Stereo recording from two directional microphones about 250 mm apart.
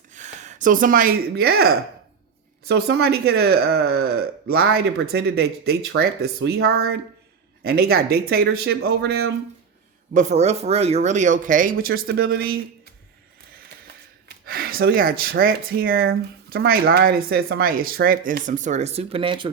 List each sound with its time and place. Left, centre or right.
0.1 s speech: right
10.2 s speech: right
13.8 s a sound: right
15.2 s speech: right